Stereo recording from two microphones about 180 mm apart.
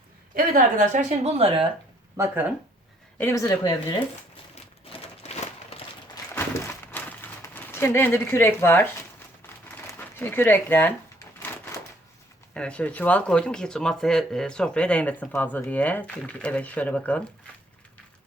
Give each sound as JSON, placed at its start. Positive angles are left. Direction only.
{"t": 0.3, "sound": "a woman's voice", "side_deg": -50}
{"t": 2.1, "sound": "speech", "side_deg": -10}
{"t": 3.2, "sound": "speech", "side_deg": 15}
{"t": 4.5, "sound": "crumpling", "side_deg": 35}
{"t": 6.3, "sound": "a sound", "side_deg": 10}
{"t": 10.0, "sound": "speech", "side_deg": 10}
{"t": 12.5, "sound": "speech", "side_deg": 5}